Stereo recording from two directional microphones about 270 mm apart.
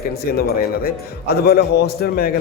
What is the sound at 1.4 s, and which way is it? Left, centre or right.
Speech, left.